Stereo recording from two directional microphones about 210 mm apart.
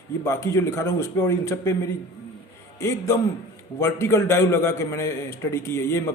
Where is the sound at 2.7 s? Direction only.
15° left (ahead or behind).